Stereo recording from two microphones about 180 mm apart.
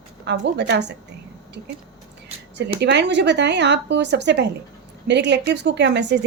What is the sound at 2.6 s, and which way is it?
A woman's voice, 70° right (ahead or behind).